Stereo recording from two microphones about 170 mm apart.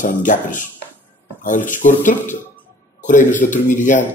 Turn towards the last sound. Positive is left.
turn(degrees=50)  # may be behind; listen again after turning